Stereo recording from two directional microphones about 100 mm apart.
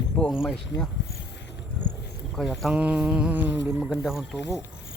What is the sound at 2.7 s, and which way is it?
Mantra, 10° right (ahead or behind).